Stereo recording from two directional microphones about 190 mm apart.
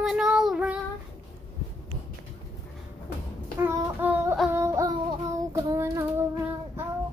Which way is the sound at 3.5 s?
10° right (ahead or behind).